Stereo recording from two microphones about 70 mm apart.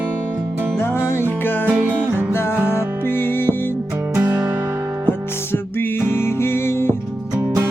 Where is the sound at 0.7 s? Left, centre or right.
Left.